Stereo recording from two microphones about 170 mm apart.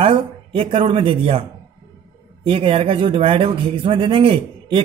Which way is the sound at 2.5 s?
30° right (ahead or behind).